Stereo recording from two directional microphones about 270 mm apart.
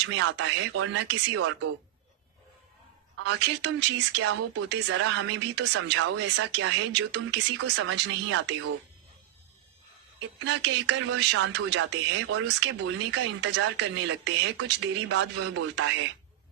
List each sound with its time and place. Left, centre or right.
0.0 s speech: right
3.2 s speech: right
7.6 s speech: right
7.9 s speech: right
10.4 s speech: right